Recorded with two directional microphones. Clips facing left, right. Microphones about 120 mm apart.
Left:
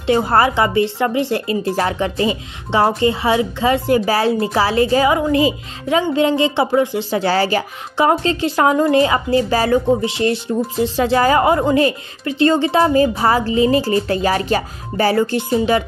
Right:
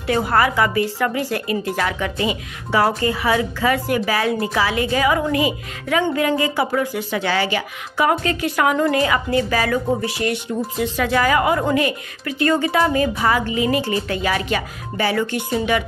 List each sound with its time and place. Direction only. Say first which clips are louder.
0.0 s a woman's voice: left 3 dB; 25° left (ahead or behind)